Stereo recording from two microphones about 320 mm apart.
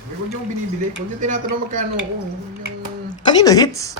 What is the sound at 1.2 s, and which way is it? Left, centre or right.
Speech, right.